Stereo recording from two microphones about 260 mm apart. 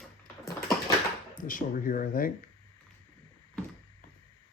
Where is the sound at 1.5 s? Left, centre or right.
Left.